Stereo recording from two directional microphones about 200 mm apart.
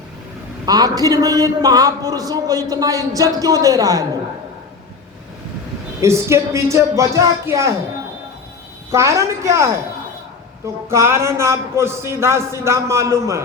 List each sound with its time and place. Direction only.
0.6 s a man's voice: 20° right (ahead or behind)
6.0 s a man's voice: 15° right (ahead or behind)
8.9 s a man's voice: 15° right (ahead or behind)
10.8 s a man's voice: 15° right (ahead or behind)